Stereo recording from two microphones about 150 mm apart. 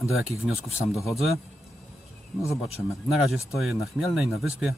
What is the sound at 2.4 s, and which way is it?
Speech, 20° left (ahead or behind).